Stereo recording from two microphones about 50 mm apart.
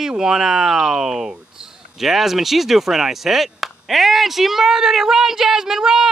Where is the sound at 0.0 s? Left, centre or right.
Centre.